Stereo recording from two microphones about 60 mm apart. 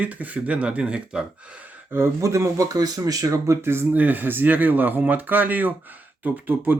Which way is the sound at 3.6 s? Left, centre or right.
Right.